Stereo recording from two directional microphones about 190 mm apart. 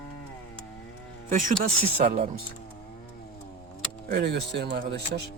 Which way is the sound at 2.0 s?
40° right (ahead or behind).